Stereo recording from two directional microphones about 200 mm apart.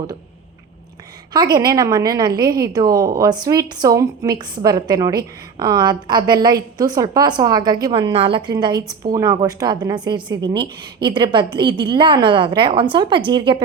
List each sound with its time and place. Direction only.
1.3 s a woman's voice: 20° right (ahead or behind)